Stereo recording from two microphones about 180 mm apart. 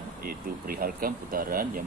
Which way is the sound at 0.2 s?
55° right (ahead or behind).